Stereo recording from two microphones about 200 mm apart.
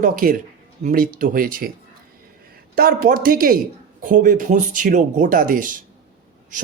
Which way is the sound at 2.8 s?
45° right (ahead or behind).